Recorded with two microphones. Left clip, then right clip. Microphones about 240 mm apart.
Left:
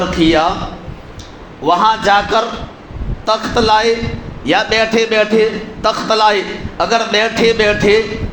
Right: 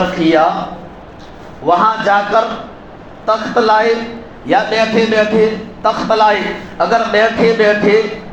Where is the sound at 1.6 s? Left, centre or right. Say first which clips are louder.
Even; left.